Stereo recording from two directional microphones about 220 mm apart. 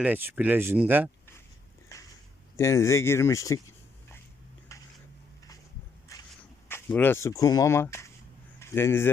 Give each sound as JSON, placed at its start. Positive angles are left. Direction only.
{"t": 0.0, "sound": "speech", "side_deg": -10}
{"t": 2.6, "sound": "speech", "side_deg": 15}
{"t": 4.7, "sound": "a sound", "side_deg": 15}
{"t": 6.1, "sound": "walk", "side_deg": 15}
{"t": 6.7, "sound": "speech", "side_deg": 10}
{"t": 8.5, "sound": "a sound", "side_deg": 10}